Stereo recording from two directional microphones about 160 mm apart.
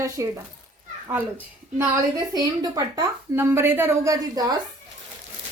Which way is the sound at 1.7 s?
20° right (ahead or behind).